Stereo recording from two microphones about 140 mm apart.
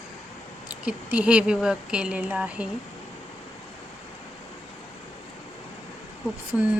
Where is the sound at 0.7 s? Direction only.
10° right (ahead or behind).